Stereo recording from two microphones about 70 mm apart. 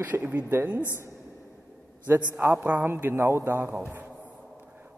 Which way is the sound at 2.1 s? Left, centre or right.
Right.